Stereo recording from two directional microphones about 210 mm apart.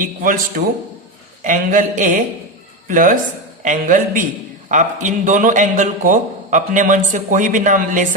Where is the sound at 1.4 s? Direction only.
40° right (ahead or behind).